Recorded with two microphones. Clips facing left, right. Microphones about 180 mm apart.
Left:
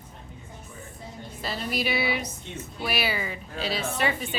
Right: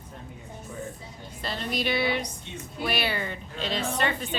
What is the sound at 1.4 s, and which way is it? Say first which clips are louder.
Speech: even; 5° left (ahead or behind).